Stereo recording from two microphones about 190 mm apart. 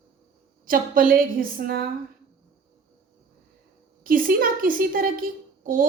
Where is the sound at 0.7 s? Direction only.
50° right (ahead or behind).